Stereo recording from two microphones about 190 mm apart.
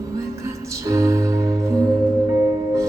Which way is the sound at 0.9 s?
15° right (ahead or behind).